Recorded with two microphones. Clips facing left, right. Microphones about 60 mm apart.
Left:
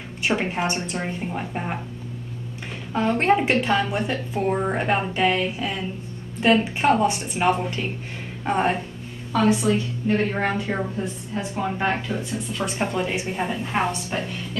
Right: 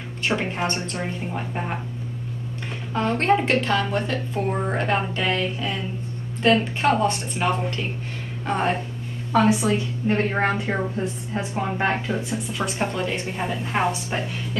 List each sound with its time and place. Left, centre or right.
0.4 s a woman's voice: centre
2.9 s a woman's voice: centre
9.3 s a woman's voice: centre
10.0 s a woman's voice: right
10.4 s a woman's voice: centre
12.3 s a woman's voice: centre